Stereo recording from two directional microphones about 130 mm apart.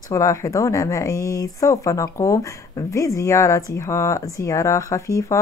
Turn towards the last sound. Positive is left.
turn(degrees=25)  # may be behind; listen again after turning